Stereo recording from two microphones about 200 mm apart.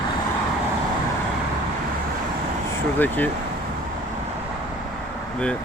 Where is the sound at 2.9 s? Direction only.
10° left (ahead or behind).